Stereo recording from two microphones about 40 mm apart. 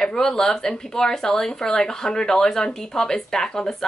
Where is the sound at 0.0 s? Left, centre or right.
Centre.